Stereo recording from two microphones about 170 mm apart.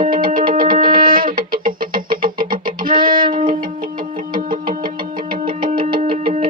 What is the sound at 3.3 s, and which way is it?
Music, 55° right (ahead or behind).